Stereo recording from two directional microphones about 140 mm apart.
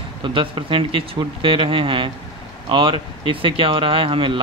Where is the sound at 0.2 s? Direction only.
35° right (ahead or behind).